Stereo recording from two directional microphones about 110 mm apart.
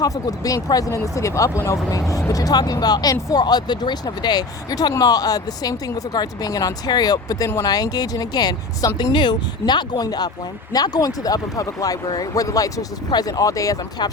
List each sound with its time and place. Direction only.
0.0 s speech: 30° left (ahead or behind)